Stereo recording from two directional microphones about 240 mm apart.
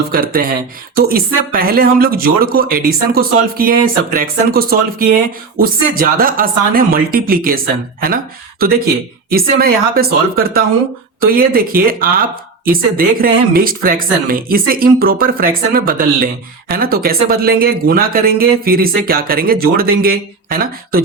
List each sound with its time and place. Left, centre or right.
0.1 s speech: right